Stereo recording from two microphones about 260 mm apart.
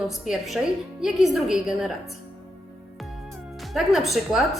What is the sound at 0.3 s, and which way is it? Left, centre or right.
A woman's voice, centre.